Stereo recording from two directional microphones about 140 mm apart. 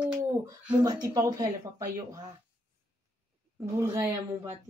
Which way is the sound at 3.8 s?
20° right (ahead or behind).